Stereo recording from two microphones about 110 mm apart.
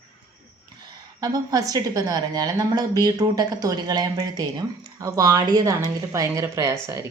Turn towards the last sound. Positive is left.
turn(degrees=-25)  # may be behind; listen again after turning